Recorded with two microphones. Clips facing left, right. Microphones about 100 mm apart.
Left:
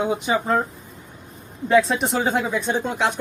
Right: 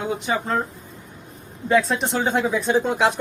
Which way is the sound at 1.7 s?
Centre (ahead or behind).